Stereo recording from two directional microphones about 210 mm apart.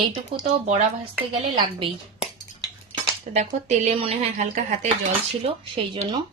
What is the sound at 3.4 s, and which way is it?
A woman's voice, 35° right (ahead or behind).